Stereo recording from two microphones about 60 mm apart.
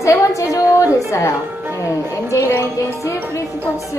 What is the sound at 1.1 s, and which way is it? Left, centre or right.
Speech, left.